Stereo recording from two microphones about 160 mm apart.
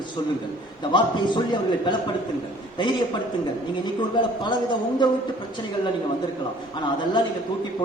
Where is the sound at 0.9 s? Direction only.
30° left (ahead or behind).